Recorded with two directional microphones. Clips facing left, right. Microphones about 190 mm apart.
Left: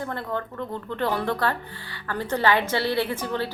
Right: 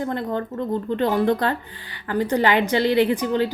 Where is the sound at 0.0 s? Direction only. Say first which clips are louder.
Right 5 dB; 20° right (ahead or behind).